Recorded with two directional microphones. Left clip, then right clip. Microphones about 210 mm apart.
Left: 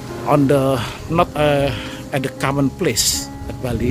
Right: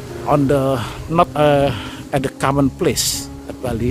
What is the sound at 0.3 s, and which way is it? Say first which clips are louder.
Speech: left 1 dB; 5° right (ahead or behind).